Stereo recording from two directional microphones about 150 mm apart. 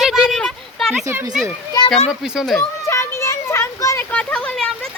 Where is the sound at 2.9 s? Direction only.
20° left (ahead or behind).